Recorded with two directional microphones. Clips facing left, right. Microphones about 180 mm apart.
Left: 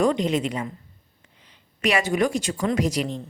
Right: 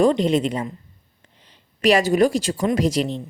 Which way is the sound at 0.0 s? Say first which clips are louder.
Right 4 dB; 30° right (ahead or behind).